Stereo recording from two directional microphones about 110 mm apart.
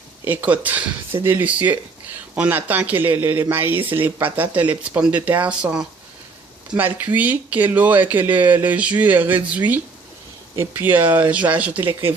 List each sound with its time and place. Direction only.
0.3 s speech: 15° right (ahead or behind)